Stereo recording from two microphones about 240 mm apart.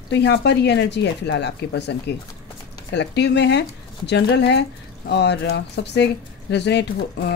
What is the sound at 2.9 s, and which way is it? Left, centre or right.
Speech, left.